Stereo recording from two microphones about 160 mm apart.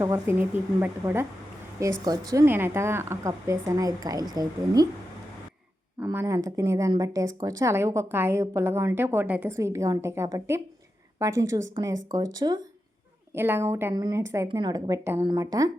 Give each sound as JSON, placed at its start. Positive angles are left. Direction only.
{"t": 0.0, "sound": "a woman's voice", "side_deg": -15}
{"t": 6.1, "sound": "a woman's voice", "side_deg": -20}
{"t": 13.3, "sound": "a woman's voice", "side_deg": -15}